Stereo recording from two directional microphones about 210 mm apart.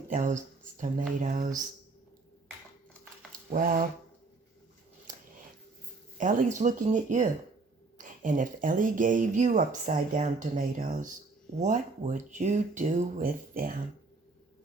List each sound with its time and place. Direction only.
0.1 s speech: 35° right (ahead or behind)
3.5 s speech: 40° right (ahead or behind)
6.1 s speech: 35° right (ahead or behind)